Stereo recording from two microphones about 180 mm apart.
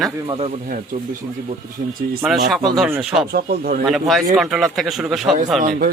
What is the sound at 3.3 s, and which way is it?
Speech, 55° right (ahead or behind).